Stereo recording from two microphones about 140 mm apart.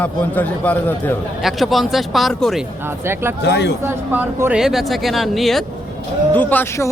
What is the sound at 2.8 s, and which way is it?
Speech, 15° right (ahead or behind).